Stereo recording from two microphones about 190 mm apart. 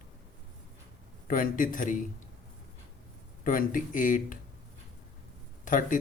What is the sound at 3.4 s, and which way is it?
Speech, 45° left (ahead or behind).